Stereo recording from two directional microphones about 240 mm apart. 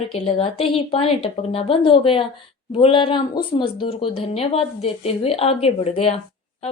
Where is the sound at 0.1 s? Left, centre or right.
Left.